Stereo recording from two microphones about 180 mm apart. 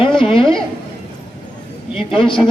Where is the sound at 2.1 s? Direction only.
30° left (ahead or behind).